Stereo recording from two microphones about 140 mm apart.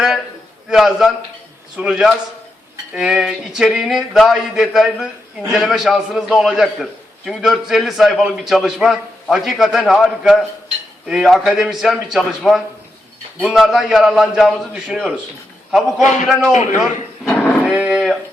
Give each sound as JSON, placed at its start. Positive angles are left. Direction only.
{"t": 0.7, "sound": "a man's voice", "side_deg": -5}
{"t": 16.0, "sound": "a man's voice", "side_deg": 60}
{"t": 16.2, "sound": "a man's voice", "side_deg": -5}
{"t": 16.5, "sound": "a man's voice", "side_deg": 55}
{"t": 17.2, "sound": "cattle", "side_deg": 10}
{"t": 17.6, "sound": "cattle", "side_deg": -5}